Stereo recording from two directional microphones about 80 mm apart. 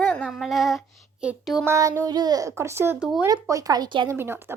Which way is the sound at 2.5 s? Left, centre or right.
Right.